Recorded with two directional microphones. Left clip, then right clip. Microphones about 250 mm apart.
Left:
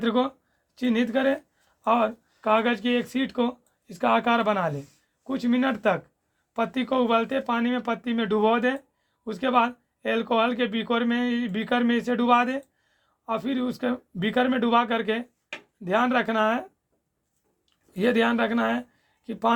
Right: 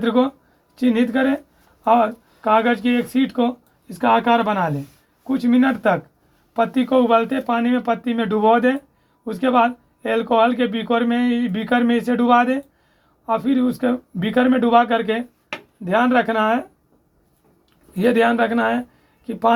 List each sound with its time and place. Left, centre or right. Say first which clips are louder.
0.0 s speech: right 6 dB; left
17.9 s speech: right 6 dB; left